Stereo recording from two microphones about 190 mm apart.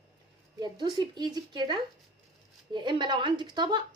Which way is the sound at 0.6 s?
25° right (ahead or behind).